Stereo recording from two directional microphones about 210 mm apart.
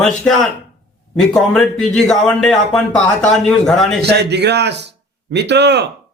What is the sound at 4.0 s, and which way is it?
A man's voice, 50° right (ahead or behind).